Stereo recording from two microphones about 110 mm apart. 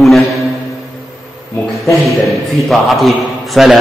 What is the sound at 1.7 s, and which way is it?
A man's voice, centre (ahead or behind).